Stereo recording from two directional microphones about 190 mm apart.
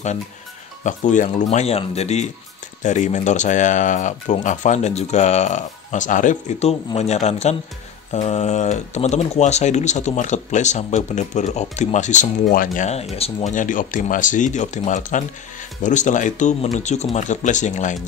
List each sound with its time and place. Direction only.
0.8 s speech: 40° left (ahead or behind)